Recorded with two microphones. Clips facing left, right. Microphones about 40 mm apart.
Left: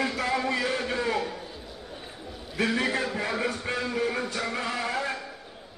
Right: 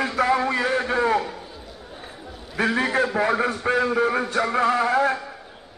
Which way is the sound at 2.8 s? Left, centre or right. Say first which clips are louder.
Right 6 dB; right.